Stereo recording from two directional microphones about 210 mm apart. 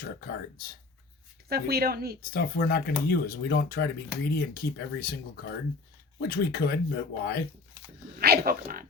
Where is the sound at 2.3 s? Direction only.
45° left (ahead or behind).